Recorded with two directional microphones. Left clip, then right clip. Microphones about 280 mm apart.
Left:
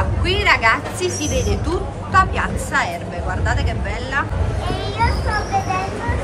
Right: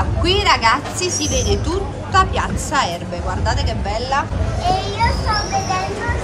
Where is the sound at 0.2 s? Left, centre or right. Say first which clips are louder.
Right 1 dB; centre.